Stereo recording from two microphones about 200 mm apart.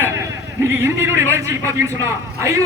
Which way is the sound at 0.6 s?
10° right (ahead or behind).